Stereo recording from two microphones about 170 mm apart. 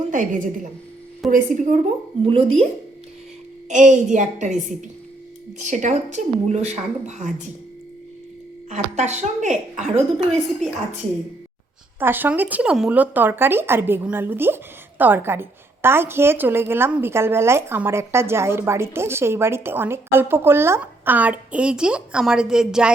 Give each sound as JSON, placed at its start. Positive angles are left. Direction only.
{"t": 0.1, "sound": "a woman's voice", "side_deg": -50}
{"t": 2.2, "sound": "speech", "side_deg": -35}
{"t": 3.7, "sound": "a woman's voice", "side_deg": -45}
{"t": 8.7, "sound": "a woman's voice", "side_deg": -45}
{"t": 11.9, "sound": "speech", "side_deg": -10}